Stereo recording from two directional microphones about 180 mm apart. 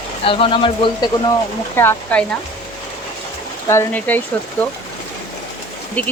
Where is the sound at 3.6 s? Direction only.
10° left (ahead or behind).